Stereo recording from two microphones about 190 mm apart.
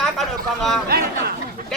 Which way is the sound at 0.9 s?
55° right (ahead or behind).